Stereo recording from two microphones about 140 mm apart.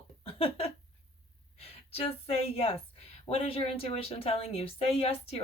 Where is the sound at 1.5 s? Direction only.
45° left (ahead or behind).